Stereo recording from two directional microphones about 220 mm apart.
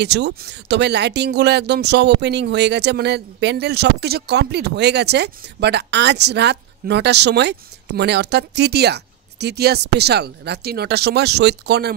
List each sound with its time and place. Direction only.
0.0 s speech: 50° right (ahead or behind)